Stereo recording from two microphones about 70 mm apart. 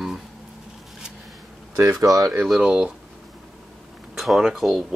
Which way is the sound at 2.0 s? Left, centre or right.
Right.